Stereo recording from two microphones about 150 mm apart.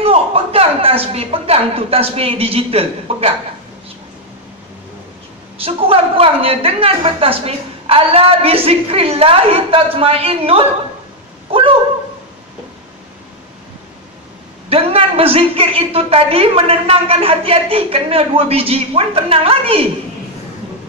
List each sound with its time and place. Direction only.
0.0 s a woman's voice: 40° right (ahead or behind)
5.6 s a woman's voice: 40° right (ahead or behind)
14.7 s a woman's voice: 40° right (ahead or behind)